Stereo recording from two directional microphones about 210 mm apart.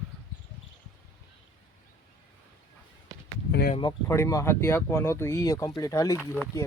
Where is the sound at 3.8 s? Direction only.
15° left (ahead or behind).